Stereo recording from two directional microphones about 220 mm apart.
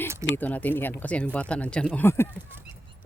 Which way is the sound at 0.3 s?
5° left (ahead or behind).